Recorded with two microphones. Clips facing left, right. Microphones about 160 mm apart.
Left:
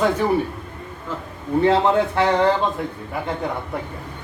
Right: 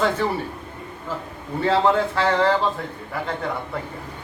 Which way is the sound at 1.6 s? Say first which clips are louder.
Left 1 dB; 20° left (ahead or behind).